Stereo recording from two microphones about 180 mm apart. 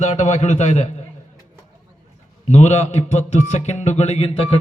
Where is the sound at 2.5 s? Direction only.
40° left (ahead or behind).